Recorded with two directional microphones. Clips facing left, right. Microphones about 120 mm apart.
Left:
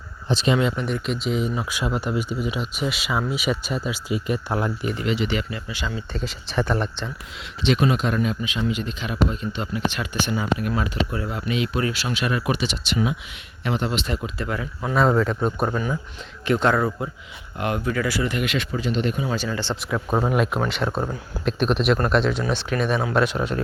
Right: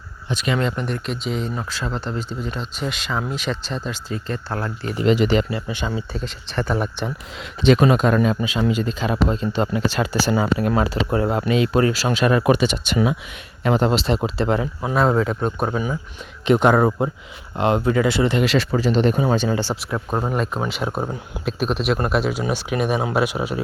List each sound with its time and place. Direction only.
0.3 s speech: 25° left (ahead or behind)
0.6 s speech: centre (ahead or behind)
5.0 s speech: 40° right (ahead or behind)
6.1 s speech: centre (ahead or behind)
6.7 s speech: 10° right (ahead or behind)
7.6 s speech: 45° right (ahead or behind); by 14.7 s 30° right (ahead or behind)
14.9 s speech: centre (ahead or behind)
16.5 s speech: 20° right (ahead or behind); by 19.2 s 35° right (ahead or behind)
19.7 s speech: centre (ahead or behind)
20.6 s speech: 5° right (ahead or behind)